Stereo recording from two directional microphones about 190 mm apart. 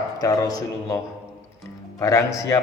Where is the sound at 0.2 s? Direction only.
20° left (ahead or behind).